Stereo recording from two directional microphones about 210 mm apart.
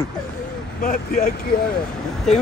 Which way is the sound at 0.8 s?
40° left (ahead or behind).